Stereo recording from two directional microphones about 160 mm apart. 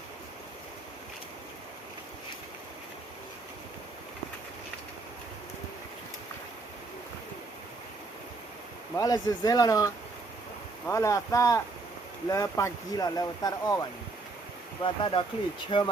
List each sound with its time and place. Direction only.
9.0 s speech: 25° left (ahead or behind)